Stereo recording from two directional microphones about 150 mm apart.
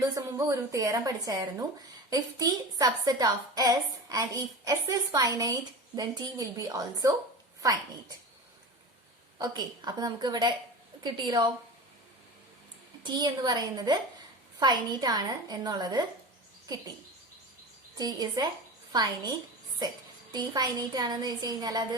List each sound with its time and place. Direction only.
0.0 s a woman's voice: 20° right (ahead or behind)
9.4 s a woman's voice: 25° right (ahead or behind)
13.0 s a woman's voice: 30° right (ahead or behind)
17.9 s a woman's voice: 25° right (ahead or behind)